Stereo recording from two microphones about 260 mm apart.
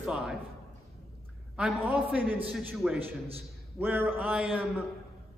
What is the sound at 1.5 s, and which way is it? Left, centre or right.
A man's voice, centre.